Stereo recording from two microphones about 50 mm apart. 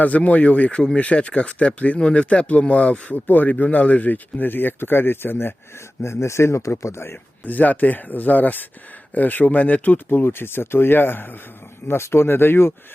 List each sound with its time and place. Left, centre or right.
0.2 s speech: left
6.0 s speech: left
7.4 s speech: left
11.9 s speech: left